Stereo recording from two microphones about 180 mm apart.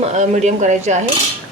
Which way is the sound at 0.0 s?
40° right (ahead or behind).